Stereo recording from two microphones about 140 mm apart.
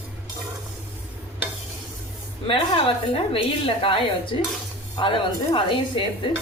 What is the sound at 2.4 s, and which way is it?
Speech, 40° left (ahead or behind).